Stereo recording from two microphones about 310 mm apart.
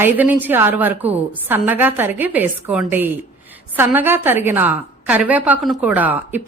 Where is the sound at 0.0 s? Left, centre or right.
Centre.